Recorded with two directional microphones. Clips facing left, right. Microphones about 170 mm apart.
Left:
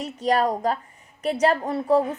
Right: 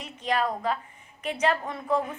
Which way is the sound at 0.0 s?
40° left (ahead or behind).